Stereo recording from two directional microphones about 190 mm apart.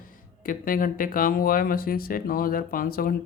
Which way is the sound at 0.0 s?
45° left (ahead or behind).